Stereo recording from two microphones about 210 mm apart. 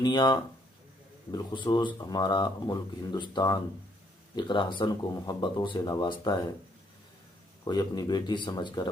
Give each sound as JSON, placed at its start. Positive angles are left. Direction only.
{"t": 0.0, "sound": "speech", "side_deg": 20}
{"t": 7.6, "sound": "speech", "side_deg": 20}